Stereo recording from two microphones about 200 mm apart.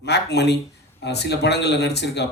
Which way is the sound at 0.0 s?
55° left (ahead or behind).